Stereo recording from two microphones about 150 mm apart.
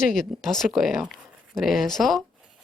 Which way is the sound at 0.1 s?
Centre (ahead or behind).